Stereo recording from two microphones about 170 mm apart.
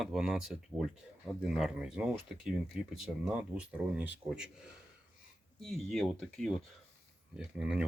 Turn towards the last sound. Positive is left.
turn(degrees=-5)  # may be behind; listen again after turning